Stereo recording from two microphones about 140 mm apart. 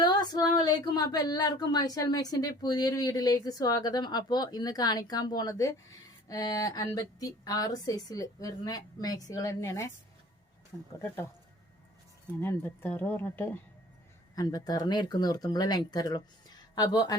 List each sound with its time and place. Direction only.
0.0 s speech: 30° left (ahead or behind)
12.4 s speech: 15° left (ahead or behind)
14.3 s speech: 25° left (ahead or behind)